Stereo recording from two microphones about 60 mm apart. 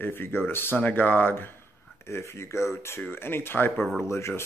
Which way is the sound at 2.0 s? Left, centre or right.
Left.